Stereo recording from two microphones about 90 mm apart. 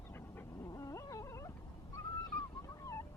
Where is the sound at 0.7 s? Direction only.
40° left (ahead or behind).